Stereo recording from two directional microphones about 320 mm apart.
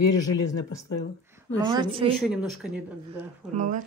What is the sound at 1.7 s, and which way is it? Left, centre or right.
Speech, centre.